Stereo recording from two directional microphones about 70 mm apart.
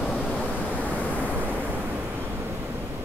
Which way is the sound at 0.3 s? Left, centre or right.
Centre.